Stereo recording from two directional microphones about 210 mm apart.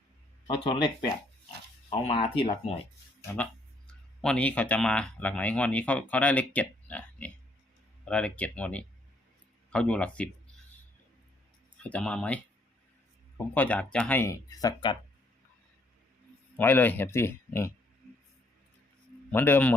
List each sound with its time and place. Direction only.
0.4 s speech: 25° left (ahead or behind)
4.2 s speech: 5° left (ahead or behind)
11.8 s speech: 5° left (ahead or behind)
13.5 s speech: 10° left (ahead or behind)
16.6 s speech: 10° left (ahead or behind)
19.3 s speech: 10° left (ahead or behind)